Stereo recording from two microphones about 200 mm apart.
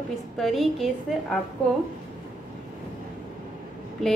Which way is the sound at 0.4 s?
Centre (ahead or behind).